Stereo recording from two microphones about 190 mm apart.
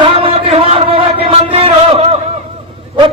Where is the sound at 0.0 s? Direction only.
30° right (ahead or behind).